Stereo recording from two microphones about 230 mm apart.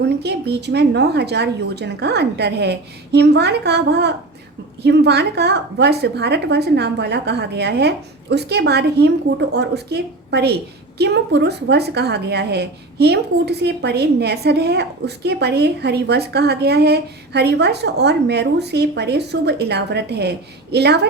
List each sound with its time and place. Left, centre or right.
0.0 s a woman's voice: right